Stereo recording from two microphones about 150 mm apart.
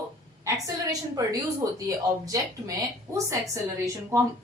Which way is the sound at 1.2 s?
20° right (ahead or behind).